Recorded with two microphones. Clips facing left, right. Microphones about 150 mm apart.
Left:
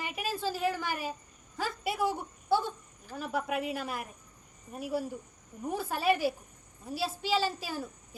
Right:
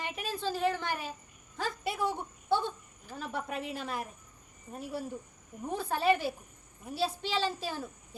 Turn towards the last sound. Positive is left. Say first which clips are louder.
# left 2 dB
turn(degrees=5)  # may be behind; listen again after turning